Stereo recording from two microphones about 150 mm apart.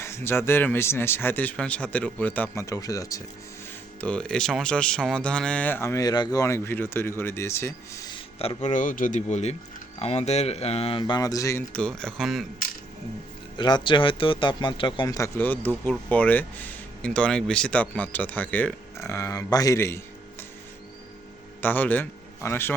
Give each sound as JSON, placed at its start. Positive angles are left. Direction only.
{"t": 0.0, "sound": "speech", "side_deg": 15}
{"t": 4.0, "sound": "speech", "side_deg": 5}
{"t": 8.1, "sound": "speech", "side_deg": 40}
{"t": 11.7, "sound": "speech", "side_deg": 5}
{"t": 13.6, "sound": "speech", "side_deg": 30}
{"t": 15.4, "sound": "speech", "side_deg": 15}
{"t": 21.6, "sound": "a man's voice", "side_deg": 10}